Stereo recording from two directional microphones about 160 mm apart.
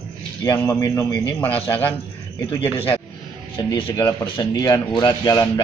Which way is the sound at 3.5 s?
30° left (ahead or behind).